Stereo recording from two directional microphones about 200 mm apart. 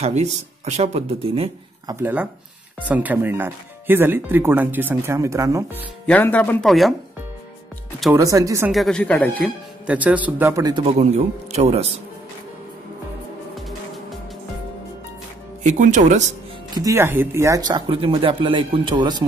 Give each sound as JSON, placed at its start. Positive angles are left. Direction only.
{"t": 0.0, "sound": "speech", "side_deg": -35}
{"t": 2.0, "sound": "speech", "side_deg": -10}
{"t": 6.0, "sound": "speech", "side_deg": 10}
{"t": 8.2, "sound": "speech", "side_deg": -15}
{"t": 8.7, "sound": "speech", "side_deg": 5}
{"t": 9.8, "sound": "speech", "side_deg": -5}
{"t": 15.6, "sound": "speech", "side_deg": -35}
{"t": 16.7, "sound": "speech", "side_deg": -15}